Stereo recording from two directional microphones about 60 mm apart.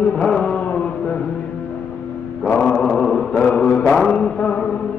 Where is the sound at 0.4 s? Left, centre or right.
Left.